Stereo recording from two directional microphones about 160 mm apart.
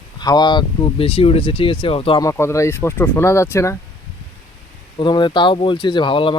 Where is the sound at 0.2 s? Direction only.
25° left (ahead or behind).